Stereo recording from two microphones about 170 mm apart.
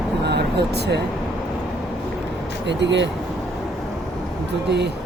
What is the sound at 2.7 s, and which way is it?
Speech, 90° right.